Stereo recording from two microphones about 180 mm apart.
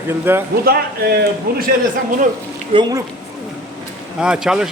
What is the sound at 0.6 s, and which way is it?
Speech, 60° right (ahead or behind).